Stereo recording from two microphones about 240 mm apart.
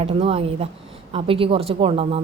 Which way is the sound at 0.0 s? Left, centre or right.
Right.